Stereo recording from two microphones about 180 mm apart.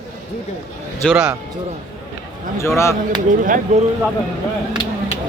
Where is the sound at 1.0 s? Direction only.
5° right (ahead or behind).